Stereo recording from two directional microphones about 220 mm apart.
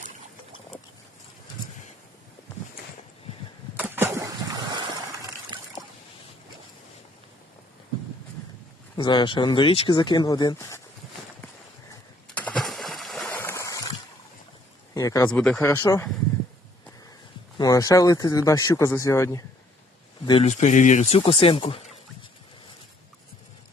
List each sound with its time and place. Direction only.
3.8 s a sound: 10° right (ahead or behind)
9.0 s speech: 20° left (ahead or behind)
12.3 s a sound: 5° left (ahead or behind)
14.9 s speech: 15° left (ahead or behind)
15.4 s speech: 5° left (ahead or behind)
17.6 s speech: 15° left (ahead or behind)
20.2 s speech: 25° left (ahead or behind)